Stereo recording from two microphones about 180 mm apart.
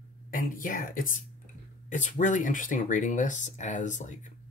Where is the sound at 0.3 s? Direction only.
50° left (ahead or behind).